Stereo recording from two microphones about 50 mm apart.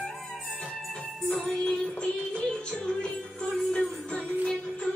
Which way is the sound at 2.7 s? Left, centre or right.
Centre.